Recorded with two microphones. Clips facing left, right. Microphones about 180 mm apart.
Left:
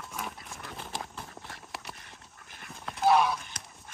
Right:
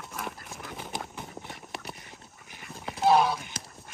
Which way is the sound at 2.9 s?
30° right (ahead or behind).